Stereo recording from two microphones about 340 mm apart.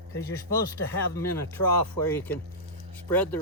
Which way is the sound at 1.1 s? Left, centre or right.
Centre.